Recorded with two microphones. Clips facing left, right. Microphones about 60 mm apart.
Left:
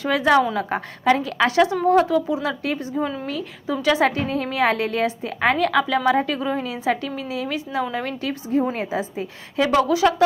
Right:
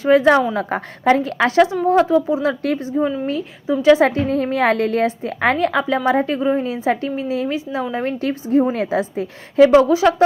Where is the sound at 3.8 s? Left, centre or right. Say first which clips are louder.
Right 6 dB; right.